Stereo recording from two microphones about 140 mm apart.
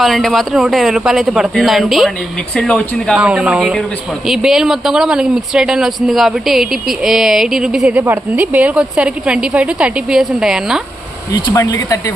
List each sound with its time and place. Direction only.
0.0 s speech: centre (ahead or behind)
3.2 s speech: 10° right (ahead or behind)
11.4 s speech: 25° left (ahead or behind)